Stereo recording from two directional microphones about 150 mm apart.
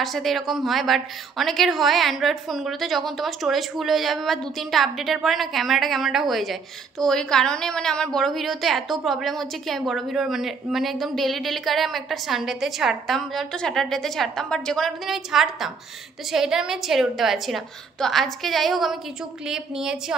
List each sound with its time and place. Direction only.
0.0 s a woman's voice: centre (ahead or behind)